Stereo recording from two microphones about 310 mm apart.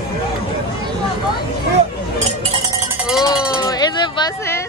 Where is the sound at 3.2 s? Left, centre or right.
Centre.